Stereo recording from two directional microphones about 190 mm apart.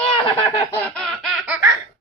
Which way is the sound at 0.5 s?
20° left (ahead or behind).